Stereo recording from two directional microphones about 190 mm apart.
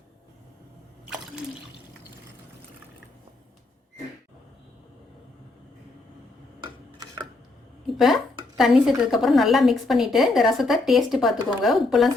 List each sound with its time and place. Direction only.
7.9 s a woman's voice: centre (ahead or behind)